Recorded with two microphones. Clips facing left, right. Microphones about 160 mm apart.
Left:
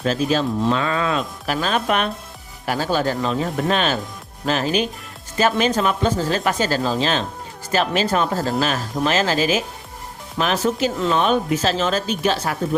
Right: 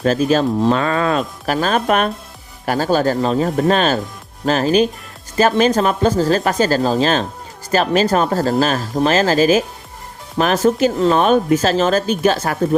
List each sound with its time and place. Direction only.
0.0 s speech: 50° right (ahead or behind)